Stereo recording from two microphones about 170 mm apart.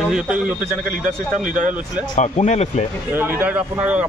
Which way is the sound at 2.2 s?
45° left (ahead or behind).